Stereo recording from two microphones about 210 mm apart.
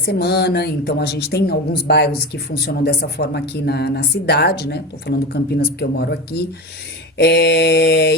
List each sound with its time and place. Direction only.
0.0 s speech: 50° left (ahead or behind)
7.2 s speech: 50° left (ahead or behind)